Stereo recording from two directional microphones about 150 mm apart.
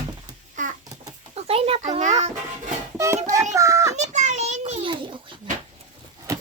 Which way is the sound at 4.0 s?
50° right (ahead or behind).